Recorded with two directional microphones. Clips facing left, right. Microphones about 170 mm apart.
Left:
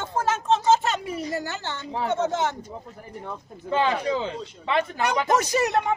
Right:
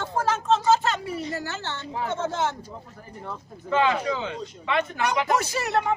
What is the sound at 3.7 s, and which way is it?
A man's voice, 30° left (ahead or behind).